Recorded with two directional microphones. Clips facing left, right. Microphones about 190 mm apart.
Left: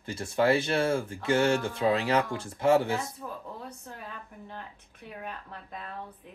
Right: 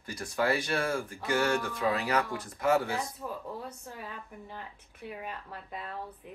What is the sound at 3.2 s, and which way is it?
Speech, 5° right (ahead or behind).